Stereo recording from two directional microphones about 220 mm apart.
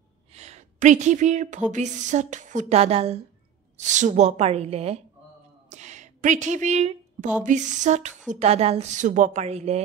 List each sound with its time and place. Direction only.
0.3 s a woman's voice: 30° right (ahead or behind)
5.7 s a sound: 30° right (ahead or behind)
7.4 s a woman's voice: 35° right (ahead or behind)